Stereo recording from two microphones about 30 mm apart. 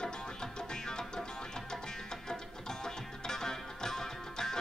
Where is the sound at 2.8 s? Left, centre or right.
Centre.